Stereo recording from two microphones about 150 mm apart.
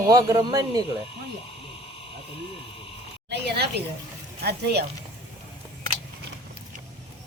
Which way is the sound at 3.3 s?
90° right.